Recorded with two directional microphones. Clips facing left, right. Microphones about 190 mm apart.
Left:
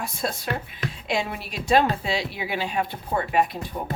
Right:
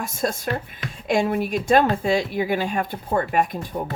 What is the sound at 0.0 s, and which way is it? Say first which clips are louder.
A woman's voice: right 4 dB; 45° right (ahead or behind).